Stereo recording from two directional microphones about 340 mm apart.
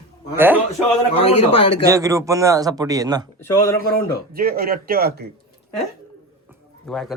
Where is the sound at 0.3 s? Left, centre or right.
Centre.